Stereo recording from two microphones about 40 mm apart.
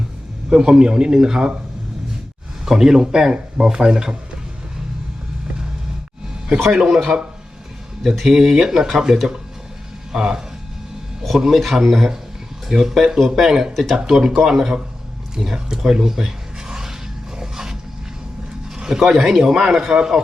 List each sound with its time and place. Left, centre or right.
0.5 s speech: right
2.6 s speech: centre
6.8 s a man's voice: centre
17.3 s a sound: centre
18.8 s zipper: centre
19.2 s speech: centre